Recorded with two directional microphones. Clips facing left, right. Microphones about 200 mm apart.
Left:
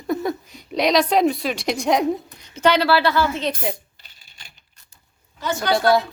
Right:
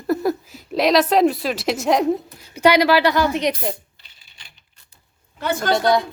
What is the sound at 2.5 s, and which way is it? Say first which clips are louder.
Speech: right 2 dB; 10° right (ahead or behind).